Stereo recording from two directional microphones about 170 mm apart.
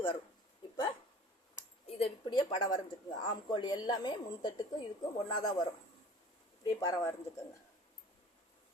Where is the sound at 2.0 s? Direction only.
25° left (ahead or behind).